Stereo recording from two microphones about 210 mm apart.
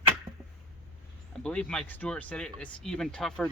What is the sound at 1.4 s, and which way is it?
Speech, 5° left (ahead or behind).